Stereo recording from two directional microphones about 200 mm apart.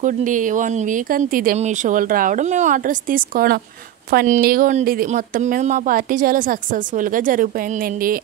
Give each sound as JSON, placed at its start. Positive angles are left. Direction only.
{"t": 0.0, "sound": "speech", "side_deg": -40}